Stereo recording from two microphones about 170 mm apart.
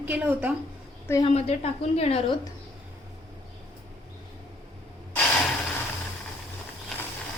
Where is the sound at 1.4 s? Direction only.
35° left (ahead or behind).